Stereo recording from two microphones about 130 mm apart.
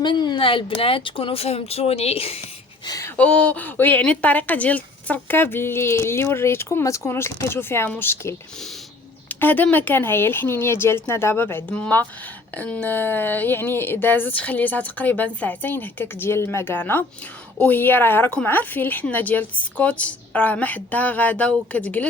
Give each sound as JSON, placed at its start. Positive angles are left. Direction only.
{"t": 0.0, "sound": "speech", "side_deg": 35}
{"t": 2.8, "sound": "speech", "side_deg": 30}
{"t": 3.2, "sound": "speech", "side_deg": 10}